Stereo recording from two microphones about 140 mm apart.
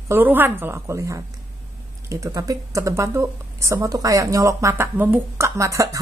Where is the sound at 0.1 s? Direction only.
15° right (ahead or behind).